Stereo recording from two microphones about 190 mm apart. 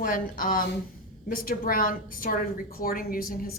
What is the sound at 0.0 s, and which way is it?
A woman's voice, 45° left (ahead or behind).